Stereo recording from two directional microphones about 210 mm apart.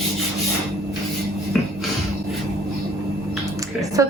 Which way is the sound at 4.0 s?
15° right (ahead or behind).